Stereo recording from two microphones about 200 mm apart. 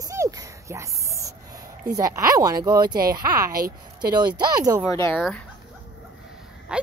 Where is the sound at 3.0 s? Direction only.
50° right (ahead or behind).